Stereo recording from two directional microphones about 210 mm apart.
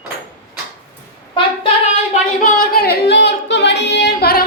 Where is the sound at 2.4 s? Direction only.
45° left (ahead or behind).